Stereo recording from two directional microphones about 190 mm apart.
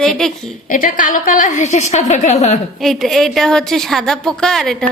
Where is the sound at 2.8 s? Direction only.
Centre (ahead or behind).